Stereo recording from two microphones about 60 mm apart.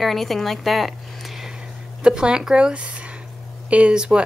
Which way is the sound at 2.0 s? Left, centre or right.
Centre.